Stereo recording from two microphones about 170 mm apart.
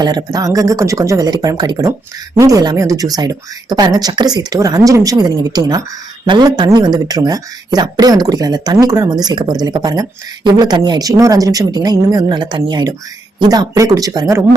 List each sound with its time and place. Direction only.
0.0 s speech: 25° right (ahead or behind)